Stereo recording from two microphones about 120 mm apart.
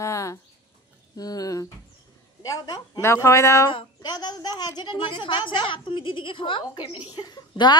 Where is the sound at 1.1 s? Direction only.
30° left (ahead or behind).